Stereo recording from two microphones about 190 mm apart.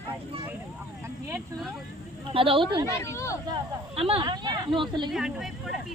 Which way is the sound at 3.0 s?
15° left (ahead or behind).